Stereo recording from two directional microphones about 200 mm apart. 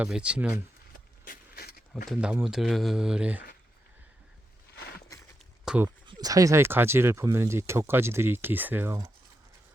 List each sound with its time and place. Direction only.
0.0 s speech: 5° right (ahead or behind)
1.2 s vehicle: 50° left (ahead or behind)
2.0 s speech: 5° right (ahead or behind)
4.7 s a sound: 55° left (ahead or behind)
5.6 s speech: 5° right (ahead or behind)
6.1 s speech: 20° right (ahead or behind)